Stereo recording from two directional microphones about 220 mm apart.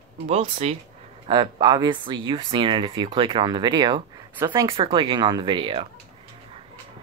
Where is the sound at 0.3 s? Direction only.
30° right (ahead or behind).